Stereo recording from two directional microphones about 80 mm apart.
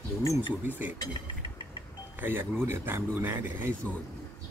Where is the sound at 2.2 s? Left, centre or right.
Right.